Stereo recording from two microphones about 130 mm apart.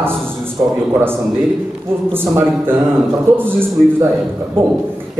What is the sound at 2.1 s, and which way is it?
Speech, 15° right (ahead or behind).